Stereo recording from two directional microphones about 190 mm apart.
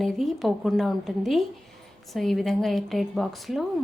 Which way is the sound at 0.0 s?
Centre (ahead or behind).